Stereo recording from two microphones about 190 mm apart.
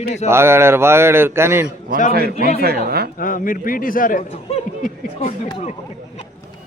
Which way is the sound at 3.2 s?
45° left (ahead or behind).